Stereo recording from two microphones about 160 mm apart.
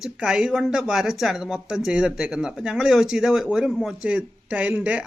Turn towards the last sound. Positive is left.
turn(degrees=-10)  # may be behind; listen again after turning